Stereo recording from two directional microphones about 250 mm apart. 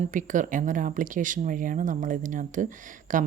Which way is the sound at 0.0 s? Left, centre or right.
Right.